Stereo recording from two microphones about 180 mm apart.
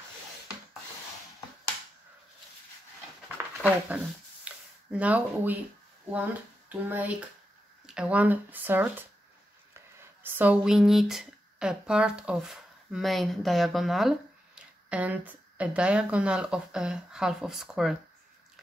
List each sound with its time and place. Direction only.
3.3 s a sound: 10° right (ahead or behind)
4.5 s speech: 5° right (ahead or behind)
6.7 s speech: 10° right (ahead or behind)